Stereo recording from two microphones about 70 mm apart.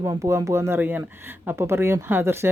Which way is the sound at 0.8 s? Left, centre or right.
Right.